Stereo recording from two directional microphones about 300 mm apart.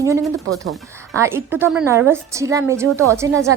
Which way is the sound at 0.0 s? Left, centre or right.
Centre.